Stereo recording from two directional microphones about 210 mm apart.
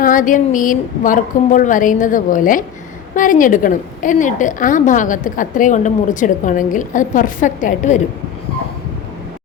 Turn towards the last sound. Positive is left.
turn(degrees=40)  # may be behind; listen again after turning